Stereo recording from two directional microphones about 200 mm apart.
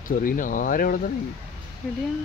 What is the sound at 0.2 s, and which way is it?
Speech, 45° left (ahead or behind).